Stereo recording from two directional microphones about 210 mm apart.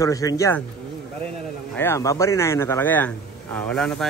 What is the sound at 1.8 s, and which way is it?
A man's voice, 15° left (ahead or behind).